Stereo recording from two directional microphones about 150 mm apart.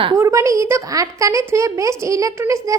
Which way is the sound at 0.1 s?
20° right (ahead or behind).